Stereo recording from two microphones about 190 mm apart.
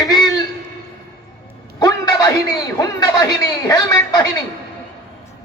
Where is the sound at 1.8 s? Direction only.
20° left (ahead or behind).